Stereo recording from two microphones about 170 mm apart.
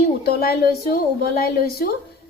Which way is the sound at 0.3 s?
65° left (ahead or behind).